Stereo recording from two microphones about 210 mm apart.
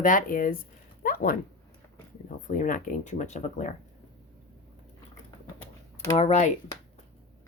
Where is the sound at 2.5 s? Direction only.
40° left (ahead or behind).